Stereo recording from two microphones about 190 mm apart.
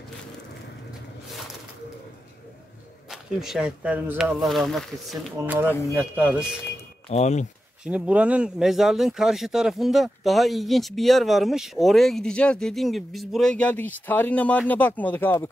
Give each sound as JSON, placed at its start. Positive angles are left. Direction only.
{"t": 3.1, "sound": "speech", "side_deg": 0}
{"t": 5.7, "sound": "speech", "side_deg": 15}
{"t": 5.9, "sound": "speech", "side_deg": -10}
{"t": 7.1, "sound": "speech", "side_deg": 35}
{"t": 7.8, "sound": "speech", "side_deg": -5}